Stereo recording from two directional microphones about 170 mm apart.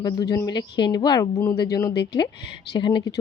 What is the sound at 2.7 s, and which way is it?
Speech, 25° left (ahead or behind).